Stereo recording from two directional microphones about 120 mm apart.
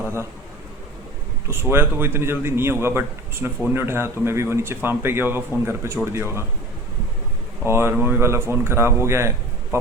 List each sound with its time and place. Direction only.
1.5 s a man's voice: 20° right (ahead or behind)
7.6 s a man's voice: 20° right (ahead or behind)